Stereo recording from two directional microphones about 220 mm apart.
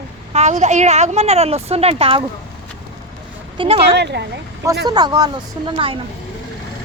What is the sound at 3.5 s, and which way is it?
Speech, 25° right (ahead or behind).